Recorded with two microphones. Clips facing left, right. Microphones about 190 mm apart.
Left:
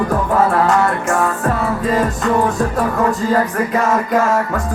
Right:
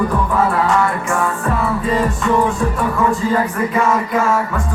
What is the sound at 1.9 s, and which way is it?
Music, 40° left (ahead or behind).